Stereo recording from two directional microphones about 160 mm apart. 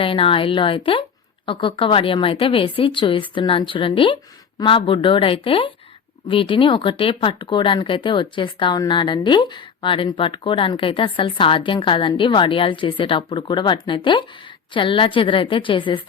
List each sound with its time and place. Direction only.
0.0 s speech: 35° left (ahead or behind)